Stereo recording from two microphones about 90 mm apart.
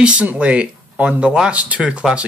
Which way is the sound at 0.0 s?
15° right (ahead or behind).